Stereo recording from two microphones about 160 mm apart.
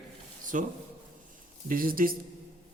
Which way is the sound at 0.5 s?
50° right (ahead or behind).